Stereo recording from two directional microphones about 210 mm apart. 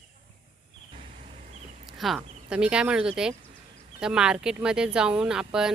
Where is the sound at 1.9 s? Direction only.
Centre (ahead or behind).